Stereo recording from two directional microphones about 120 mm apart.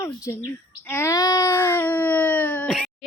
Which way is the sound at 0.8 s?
20° left (ahead or behind).